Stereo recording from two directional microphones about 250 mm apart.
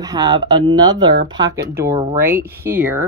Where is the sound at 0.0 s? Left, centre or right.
Centre.